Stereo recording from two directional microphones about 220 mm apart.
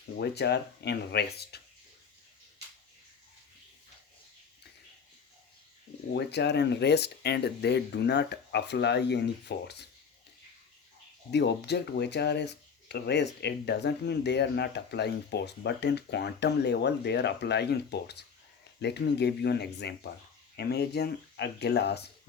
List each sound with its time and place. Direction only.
0.2 s speech: 50° left (ahead or behind)
6.1 s speech: 50° left (ahead or behind)
11.3 s speech: 50° left (ahead or behind)